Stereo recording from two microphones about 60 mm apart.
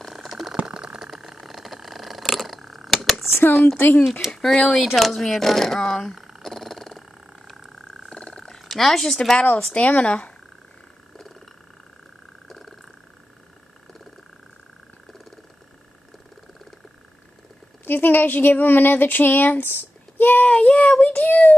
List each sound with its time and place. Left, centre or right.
0.0 s a sound: centre
3.7 s speech: left
4.3 s speech: centre
4.6 s speech: centre
4.8 s speech: centre
6.1 s frog: centre
8.1 s a sound: centre
8.5 s a woman's voice: centre
9.8 s speech: left
11.1 s a sound: centre
12.4 s a sound: centre
17.8 s speech: left
20.5 s child singing: left